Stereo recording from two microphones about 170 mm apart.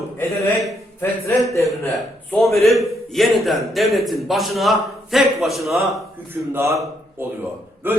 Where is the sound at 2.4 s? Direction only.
Centre (ahead or behind).